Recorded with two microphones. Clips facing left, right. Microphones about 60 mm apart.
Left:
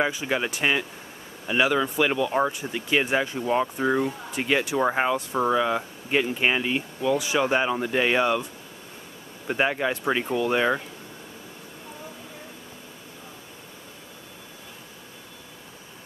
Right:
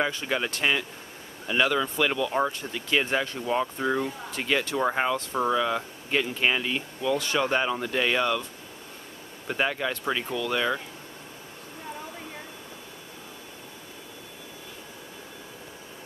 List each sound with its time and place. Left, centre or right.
0.0 s speech: centre
9.5 s speech: centre